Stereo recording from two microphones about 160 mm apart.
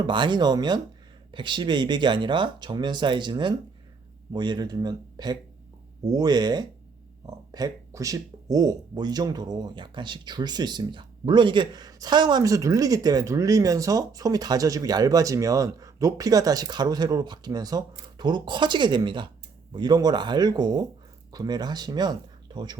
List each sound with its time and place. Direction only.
0.0 s speech: 30° right (ahead or behind)